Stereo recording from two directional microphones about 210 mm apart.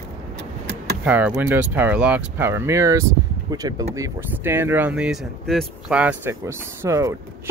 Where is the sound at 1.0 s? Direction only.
10° right (ahead or behind).